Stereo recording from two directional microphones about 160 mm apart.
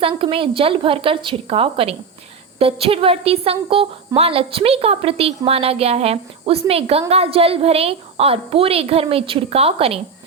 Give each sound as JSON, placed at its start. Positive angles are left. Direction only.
{"t": 0.0, "sound": "a woman's voice", "side_deg": -35}